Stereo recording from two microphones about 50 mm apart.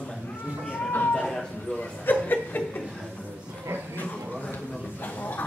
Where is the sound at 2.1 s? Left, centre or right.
Left.